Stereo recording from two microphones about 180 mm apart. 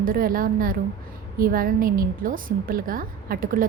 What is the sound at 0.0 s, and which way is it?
A woman's voice, 50° right (ahead or behind).